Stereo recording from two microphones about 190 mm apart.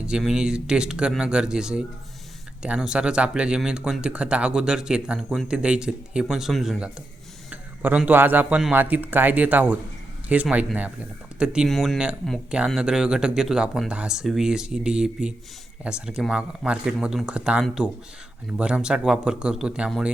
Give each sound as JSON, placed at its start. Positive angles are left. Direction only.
{"t": 0.0, "sound": "speech", "side_deg": -5}